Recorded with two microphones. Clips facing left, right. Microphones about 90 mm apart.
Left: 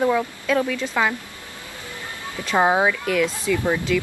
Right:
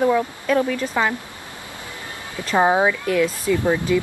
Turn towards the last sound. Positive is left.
turn(degrees=-20)  # may be behind; listen again after turning